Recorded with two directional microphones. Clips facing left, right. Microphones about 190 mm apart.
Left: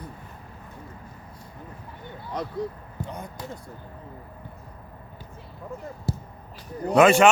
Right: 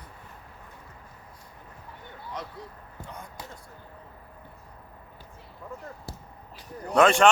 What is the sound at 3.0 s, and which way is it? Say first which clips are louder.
Basketball bounce: left 7 dB; 20° left (ahead or behind).